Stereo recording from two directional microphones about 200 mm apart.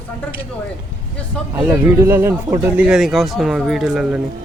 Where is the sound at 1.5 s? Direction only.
10° right (ahead or behind).